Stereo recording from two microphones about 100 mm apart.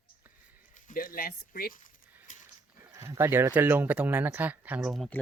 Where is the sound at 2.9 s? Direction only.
30° right (ahead or behind).